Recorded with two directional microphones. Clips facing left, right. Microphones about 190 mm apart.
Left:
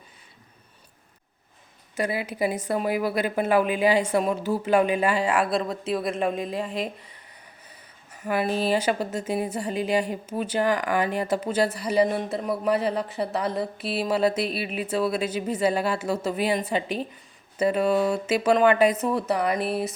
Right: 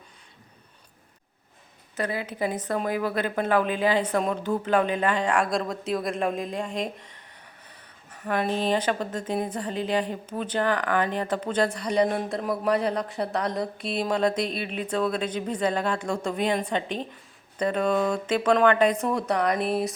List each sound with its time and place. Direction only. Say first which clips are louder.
2.0 s a woman's voice: left 2 dB; 10° left (ahead or behind)
8.2 s a woman's voice: left 1 dB; 10° left (ahead or behind)